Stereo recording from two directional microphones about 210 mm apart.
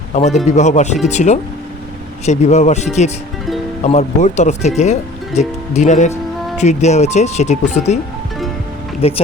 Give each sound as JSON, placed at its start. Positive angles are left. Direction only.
{"t": 0.1, "sound": "speech", "side_deg": 30}
{"t": 9.0, "sound": "speech", "side_deg": 30}